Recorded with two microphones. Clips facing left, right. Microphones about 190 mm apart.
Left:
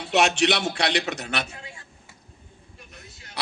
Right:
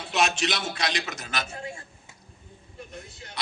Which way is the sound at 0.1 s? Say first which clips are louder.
Left 5 dB; 70° left (ahead or behind).